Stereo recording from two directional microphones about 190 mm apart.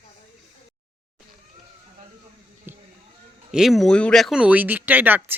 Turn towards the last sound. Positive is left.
turn(degrees=-10)  # may be behind; listen again after turning